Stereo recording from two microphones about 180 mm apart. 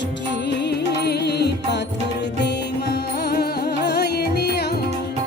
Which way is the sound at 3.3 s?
65° left (ahead or behind).